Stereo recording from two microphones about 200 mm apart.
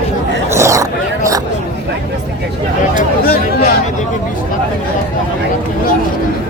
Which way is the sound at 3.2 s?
50° left (ahead or behind).